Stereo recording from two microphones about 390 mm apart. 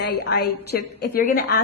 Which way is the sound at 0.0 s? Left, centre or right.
Left.